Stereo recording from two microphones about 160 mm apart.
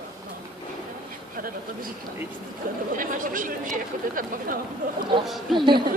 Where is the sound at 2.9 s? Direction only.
55° right (ahead or behind).